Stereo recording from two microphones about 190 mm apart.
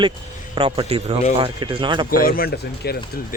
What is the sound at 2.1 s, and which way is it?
Speech, 50° left (ahead or behind).